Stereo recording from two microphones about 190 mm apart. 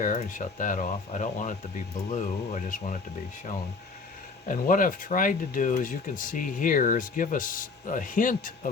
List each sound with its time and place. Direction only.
0.0 s speech: 40° left (ahead or behind)
4.4 s speech: 45° left (ahead or behind)